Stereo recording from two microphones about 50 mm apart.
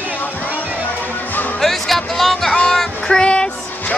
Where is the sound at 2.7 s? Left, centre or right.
Centre.